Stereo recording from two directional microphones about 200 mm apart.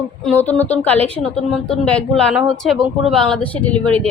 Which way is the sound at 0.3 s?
10° left (ahead or behind).